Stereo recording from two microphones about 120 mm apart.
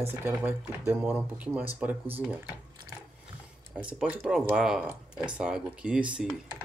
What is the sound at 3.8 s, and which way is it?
Speech, 10° right (ahead or behind).